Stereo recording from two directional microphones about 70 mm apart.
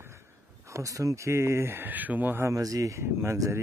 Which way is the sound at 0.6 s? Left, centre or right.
Right.